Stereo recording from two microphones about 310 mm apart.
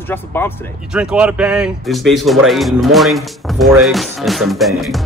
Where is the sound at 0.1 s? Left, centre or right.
Centre.